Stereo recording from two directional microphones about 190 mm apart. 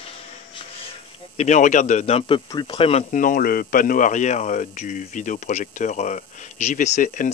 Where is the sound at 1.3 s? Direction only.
40° left (ahead or behind).